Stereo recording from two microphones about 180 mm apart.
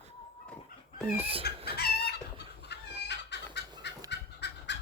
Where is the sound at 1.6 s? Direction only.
60° left (ahead or behind).